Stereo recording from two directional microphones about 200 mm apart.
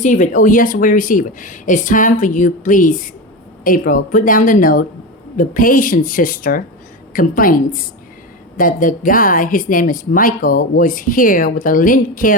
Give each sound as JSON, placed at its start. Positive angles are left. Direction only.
{"t": 0.0, "sound": "a woman's voice", "side_deg": 40}